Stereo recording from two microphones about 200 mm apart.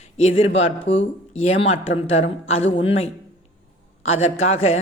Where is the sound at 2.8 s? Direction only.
30° left (ahead or behind).